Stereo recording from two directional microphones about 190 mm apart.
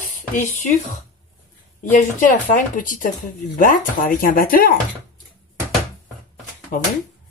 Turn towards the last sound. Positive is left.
turn(degrees=50)  # may be behind; listen again after turning